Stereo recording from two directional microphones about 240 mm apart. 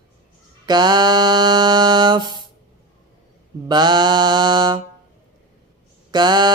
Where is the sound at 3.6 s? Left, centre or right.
Centre.